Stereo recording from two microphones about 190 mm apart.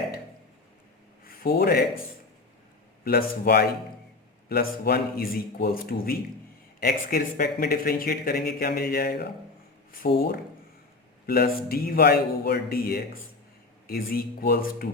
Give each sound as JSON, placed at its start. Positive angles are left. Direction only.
{"t": 1.2, "sound": "a sound", "side_deg": 50}
{"t": 3.0, "sound": "speech", "side_deg": 55}
{"t": 11.3, "sound": "speech", "side_deg": 55}